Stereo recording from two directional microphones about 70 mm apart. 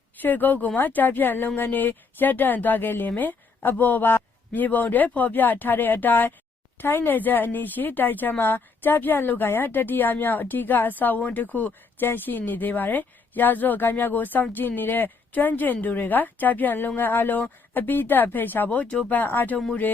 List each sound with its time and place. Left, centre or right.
0.2 s speech: left